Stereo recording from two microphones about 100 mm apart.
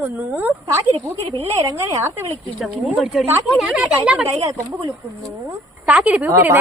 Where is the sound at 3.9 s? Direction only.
15° right (ahead or behind).